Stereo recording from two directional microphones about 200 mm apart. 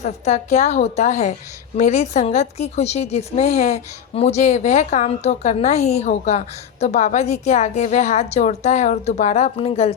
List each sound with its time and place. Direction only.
0.0 s a woman's voice: 35° left (ahead or behind)